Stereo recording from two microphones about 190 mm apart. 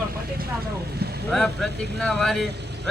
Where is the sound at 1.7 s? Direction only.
60° right (ahead or behind).